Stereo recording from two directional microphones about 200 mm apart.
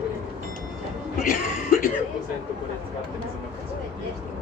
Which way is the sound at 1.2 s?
45° left (ahead or behind).